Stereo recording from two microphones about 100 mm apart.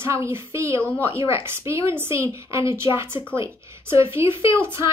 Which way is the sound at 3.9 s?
25° right (ahead or behind).